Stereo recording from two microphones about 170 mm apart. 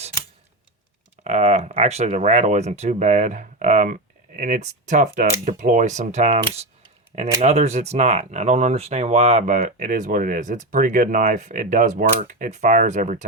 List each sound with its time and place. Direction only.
1.2 s speech: 40° right (ahead or behind)